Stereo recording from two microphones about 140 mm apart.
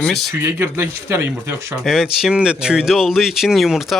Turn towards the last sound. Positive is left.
turn(degrees=0)  # may be behind; listen again after turning